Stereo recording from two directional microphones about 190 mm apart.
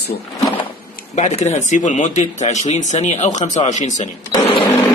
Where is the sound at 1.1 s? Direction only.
35° left (ahead or behind).